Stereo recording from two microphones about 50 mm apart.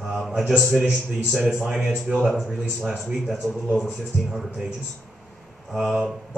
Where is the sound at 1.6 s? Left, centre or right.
Centre.